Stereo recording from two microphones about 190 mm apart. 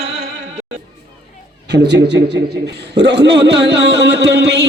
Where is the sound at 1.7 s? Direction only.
65° right (ahead or behind).